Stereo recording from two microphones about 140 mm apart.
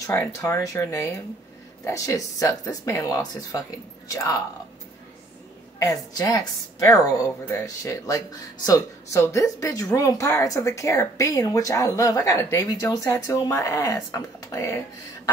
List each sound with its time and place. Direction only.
0.0 s speech: 20° left (ahead or behind)
5.8 s speech: 25° left (ahead or behind)